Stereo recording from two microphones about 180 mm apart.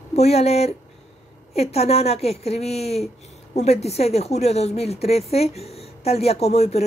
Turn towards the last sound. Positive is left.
turn(degrees=35)  # may be behind; listen again after turning